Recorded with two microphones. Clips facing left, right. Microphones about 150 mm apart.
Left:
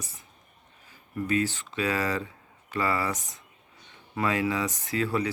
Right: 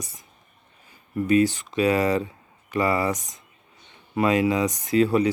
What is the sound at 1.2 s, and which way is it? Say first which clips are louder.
Speech: right 8 dB; 15° right (ahead or behind).